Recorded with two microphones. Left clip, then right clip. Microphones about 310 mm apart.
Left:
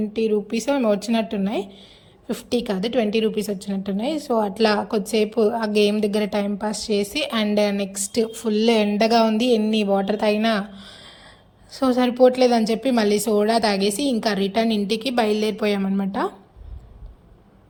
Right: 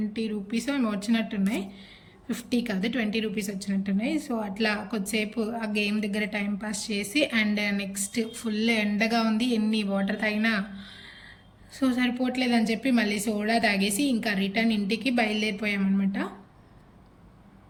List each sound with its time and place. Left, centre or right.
0.1 s a woman's voice: centre